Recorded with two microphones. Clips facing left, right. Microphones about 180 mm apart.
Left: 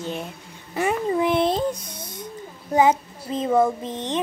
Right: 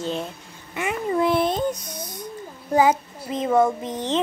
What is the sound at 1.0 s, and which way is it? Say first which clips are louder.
Child singing: right 2 dB; 20° left (ahead or behind).